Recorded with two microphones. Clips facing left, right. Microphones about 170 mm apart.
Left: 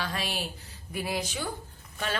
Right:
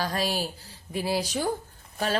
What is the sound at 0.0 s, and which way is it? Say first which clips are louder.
A woman's voice: right 5 dB; 40° right (ahead or behind).